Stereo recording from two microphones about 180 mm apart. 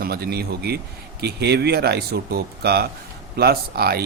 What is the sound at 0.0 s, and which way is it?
Speech, 60° right (ahead or behind).